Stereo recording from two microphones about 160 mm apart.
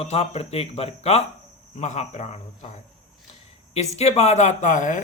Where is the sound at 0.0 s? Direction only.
40° left (ahead or behind).